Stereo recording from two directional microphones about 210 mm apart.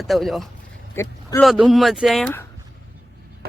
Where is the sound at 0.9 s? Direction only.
15° left (ahead or behind).